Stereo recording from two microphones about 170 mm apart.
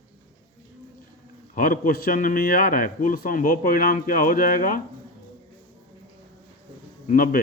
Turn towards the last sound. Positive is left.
turn(degrees=55)  # may be behind; listen again after turning